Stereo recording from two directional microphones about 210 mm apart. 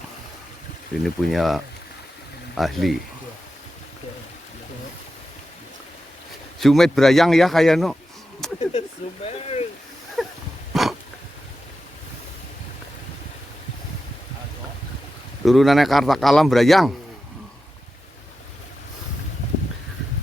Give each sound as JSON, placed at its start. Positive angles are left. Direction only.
{"t": 1.0, "sound": "speech", "side_deg": 0}
{"t": 6.6, "sound": "speech", "side_deg": 0}
{"t": 8.4, "sound": "a sound", "side_deg": 0}
{"t": 9.2, "sound": "speech", "side_deg": 30}
{"t": 10.2, "sound": "dog", "side_deg": 0}
{"t": 10.7, "sound": "a sound", "side_deg": 0}
{"t": 15.4, "sound": "speech", "side_deg": 0}